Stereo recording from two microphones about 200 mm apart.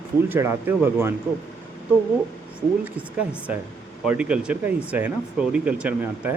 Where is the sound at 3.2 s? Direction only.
5° right (ahead or behind).